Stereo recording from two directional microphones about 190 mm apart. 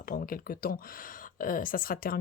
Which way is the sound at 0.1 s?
50° left (ahead or behind).